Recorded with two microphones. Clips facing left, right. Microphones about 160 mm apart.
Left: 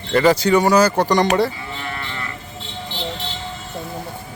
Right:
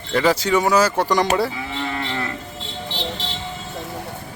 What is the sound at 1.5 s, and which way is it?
Cattle, 90° right.